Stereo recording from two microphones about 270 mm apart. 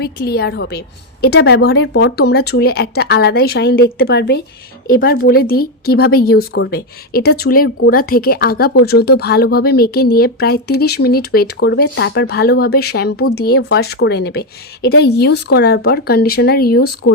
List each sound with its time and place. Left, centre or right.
0.0 s speech: left